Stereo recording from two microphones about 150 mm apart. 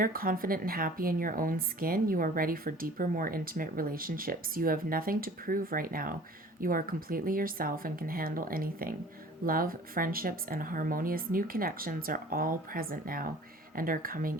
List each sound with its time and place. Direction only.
0.0 s speech: 75° right (ahead or behind)